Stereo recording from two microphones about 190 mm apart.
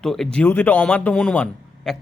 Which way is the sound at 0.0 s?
Centre (ahead or behind).